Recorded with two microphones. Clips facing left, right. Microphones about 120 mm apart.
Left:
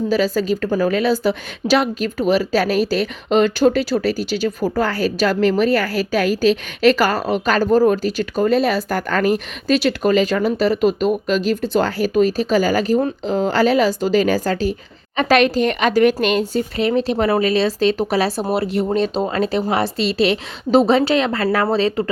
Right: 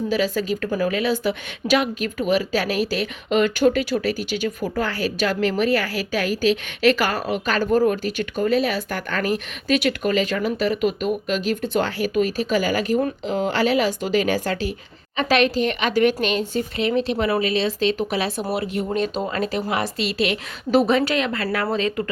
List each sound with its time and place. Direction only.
0.1 s a woman's voice: 35° left (ahead or behind)